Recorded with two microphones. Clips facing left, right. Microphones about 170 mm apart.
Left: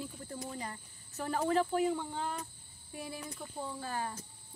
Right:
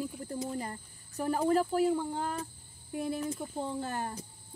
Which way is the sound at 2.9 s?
55° right (ahead or behind).